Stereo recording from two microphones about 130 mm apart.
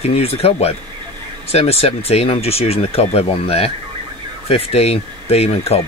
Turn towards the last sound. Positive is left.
turn(degrees=55)  # may be behind; listen again after turning